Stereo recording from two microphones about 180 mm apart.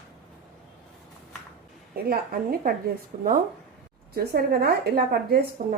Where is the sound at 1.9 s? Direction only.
55° right (ahead or behind).